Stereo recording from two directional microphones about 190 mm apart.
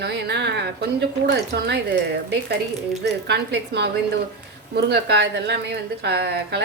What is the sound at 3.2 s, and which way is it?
A woman's voice, 60° right (ahead or behind).